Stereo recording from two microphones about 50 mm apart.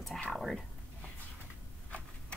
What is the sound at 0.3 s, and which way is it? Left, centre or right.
Whispering, centre.